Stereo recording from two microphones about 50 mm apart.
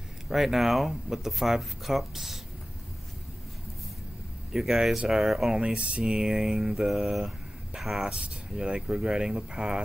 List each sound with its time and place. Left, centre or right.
0.3 s speech: centre
4.5 s speech: centre
8.1 s speech: centre